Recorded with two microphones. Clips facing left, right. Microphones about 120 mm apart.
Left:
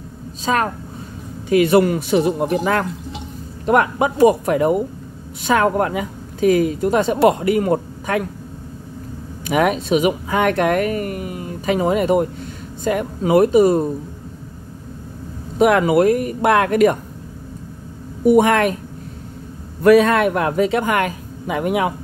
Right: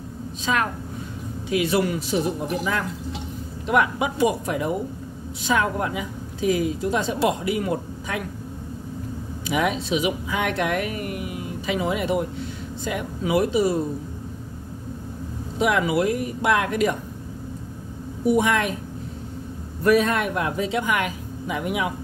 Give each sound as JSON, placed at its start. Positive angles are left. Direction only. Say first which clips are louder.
{"t": 0.5, "sound": "speech", "louder": "left 5 dB", "side_deg": 45}
{"t": 1.5, "sound": "speech", "louder": "left 8 dB", "side_deg": 55}
{"t": 9.5, "sound": "speech", "louder": "left 6 dB", "side_deg": 55}
{"t": 15.6, "sound": "speech", "louder": "left 7 dB", "side_deg": 55}
{"t": 18.3, "sound": "speech", "louder": "left 7 dB", "side_deg": 55}
{"t": 19.8, "sound": "speech", "louder": "left 7 dB", "side_deg": 80}